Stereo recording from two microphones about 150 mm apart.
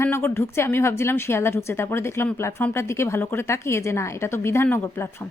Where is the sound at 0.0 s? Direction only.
15° left (ahead or behind).